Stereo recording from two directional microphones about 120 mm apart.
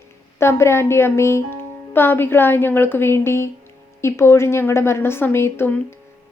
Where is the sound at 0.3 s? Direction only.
20° left (ahead or behind).